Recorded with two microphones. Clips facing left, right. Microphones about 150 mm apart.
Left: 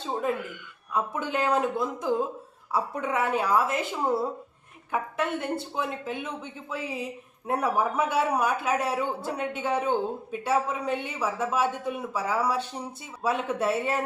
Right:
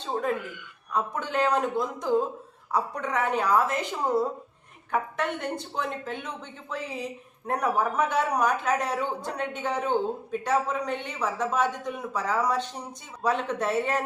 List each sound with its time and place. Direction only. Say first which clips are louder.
0.9 s a woman's voice: right 1 dB; 10° left (ahead or behind)